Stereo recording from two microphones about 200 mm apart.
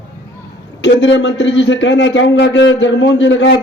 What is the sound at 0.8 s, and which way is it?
A man's voice, 65° left (ahead or behind).